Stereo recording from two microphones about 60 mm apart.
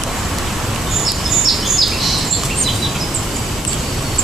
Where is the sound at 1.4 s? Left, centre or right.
Centre.